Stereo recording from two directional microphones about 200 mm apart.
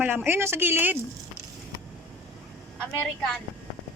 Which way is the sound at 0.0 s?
10° right (ahead or behind).